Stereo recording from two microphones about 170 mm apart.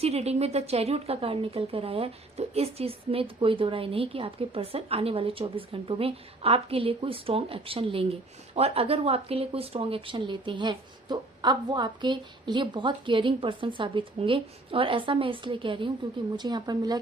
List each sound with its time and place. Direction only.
0.0 s speech: 35° right (ahead or behind)